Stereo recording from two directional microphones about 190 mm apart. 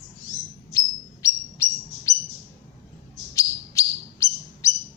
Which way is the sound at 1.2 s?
15° left (ahead or behind).